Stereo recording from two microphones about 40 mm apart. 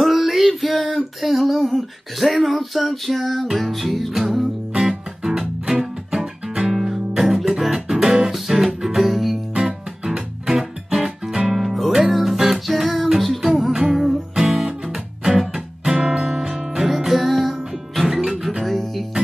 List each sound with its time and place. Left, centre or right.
0.0 s music: centre
2.1 s a sound: centre
4.7 s music: centre